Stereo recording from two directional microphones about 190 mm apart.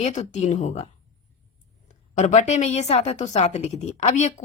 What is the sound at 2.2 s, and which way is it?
A woman's voice, 40° left (ahead or behind).